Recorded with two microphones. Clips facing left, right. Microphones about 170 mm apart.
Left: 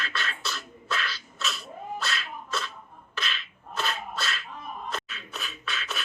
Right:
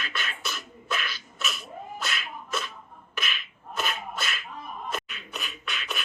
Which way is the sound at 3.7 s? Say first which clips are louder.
Even; 15° right (ahead or behind).